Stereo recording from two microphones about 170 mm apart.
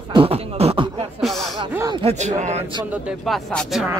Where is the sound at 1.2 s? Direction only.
Centre (ahead or behind).